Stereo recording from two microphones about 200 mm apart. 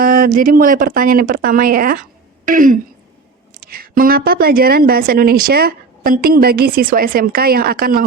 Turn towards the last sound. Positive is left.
turn(degrees=-45)  # may be behind; listen again after turning